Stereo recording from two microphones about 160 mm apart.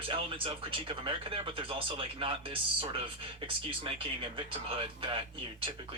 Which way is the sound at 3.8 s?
30° right (ahead or behind).